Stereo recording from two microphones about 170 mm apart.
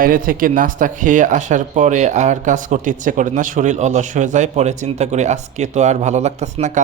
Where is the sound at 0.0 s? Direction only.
55° right (ahead or behind).